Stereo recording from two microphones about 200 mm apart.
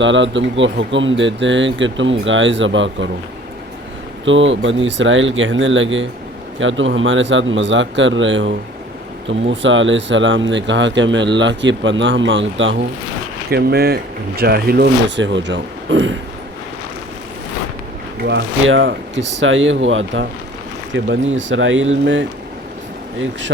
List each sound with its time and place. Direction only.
0.0 s speech: 65° right (ahead or behind)
4.3 s speech: 70° right (ahead or behind)
13.5 s speech: 55° right (ahead or behind); by 16.1 s 70° right (ahead or behind)
18.2 s speech: 60° right (ahead or behind)